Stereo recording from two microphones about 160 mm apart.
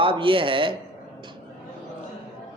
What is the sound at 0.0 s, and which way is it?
Speech, 30° right (ahead or behind).